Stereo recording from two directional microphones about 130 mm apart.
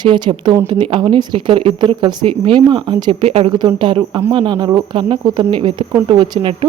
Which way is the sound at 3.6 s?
35° right (ahead or behind).